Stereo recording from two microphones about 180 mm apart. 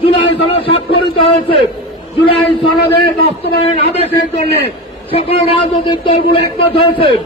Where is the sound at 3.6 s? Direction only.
35° left (ahead or behind).